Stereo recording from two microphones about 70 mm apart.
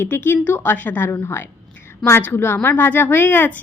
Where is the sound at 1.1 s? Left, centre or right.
Left.